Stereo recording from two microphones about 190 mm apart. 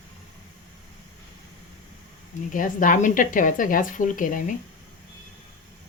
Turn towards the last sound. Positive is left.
turn(degrees=45)  # may be behind; listen again after turning